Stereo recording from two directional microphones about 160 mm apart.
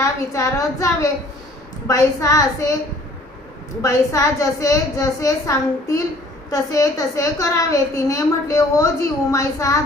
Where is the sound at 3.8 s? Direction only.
20° left (ahead or behind).